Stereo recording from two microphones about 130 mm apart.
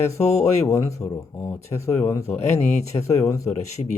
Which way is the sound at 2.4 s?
60° left (ahead or behind).